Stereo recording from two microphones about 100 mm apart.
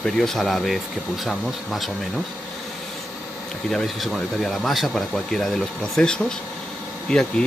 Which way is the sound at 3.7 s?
Centre (ahead or behind).